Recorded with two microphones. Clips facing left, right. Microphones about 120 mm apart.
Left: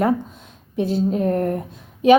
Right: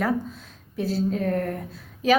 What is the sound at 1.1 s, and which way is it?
Speech, 35° left (ahead or behind).